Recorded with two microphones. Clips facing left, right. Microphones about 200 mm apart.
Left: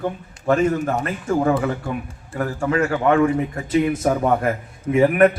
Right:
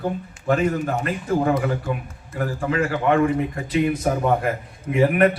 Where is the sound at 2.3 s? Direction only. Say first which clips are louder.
Left 2 dB; 50° left (ahead or behind).